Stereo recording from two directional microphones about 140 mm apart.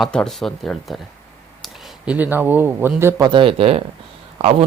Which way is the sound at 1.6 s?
Centre (ahead or behind).